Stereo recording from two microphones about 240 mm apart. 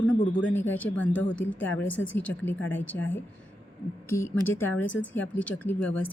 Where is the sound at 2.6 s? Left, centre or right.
Left.